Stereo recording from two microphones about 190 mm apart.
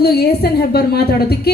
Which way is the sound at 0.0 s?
55° left (ahead or behind).